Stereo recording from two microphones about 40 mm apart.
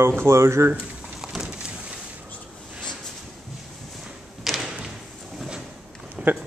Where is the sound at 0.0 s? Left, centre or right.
Right.